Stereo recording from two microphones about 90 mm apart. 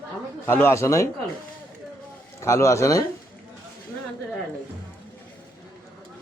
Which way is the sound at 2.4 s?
35° left (ahead or behind).